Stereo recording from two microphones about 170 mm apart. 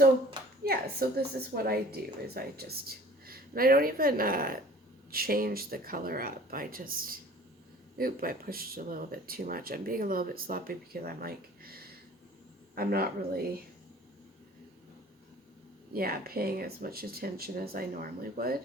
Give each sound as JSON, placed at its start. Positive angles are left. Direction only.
{"t": 0.6, "sound": "speech", "side_deg": -65}
{"t": 15.9, "sound": "speech", "side_deg": -60}